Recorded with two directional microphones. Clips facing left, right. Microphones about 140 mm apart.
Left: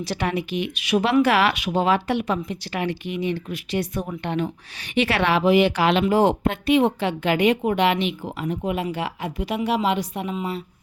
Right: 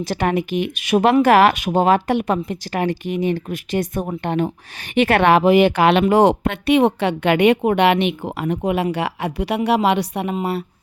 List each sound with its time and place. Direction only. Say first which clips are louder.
0.0 s speech: right 5 dB; 50° right (ahead or behind)